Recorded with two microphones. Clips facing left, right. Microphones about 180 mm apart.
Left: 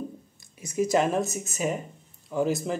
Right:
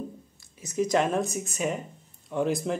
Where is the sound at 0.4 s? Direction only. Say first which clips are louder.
Left 1 dB; 10° left (ahead or behind).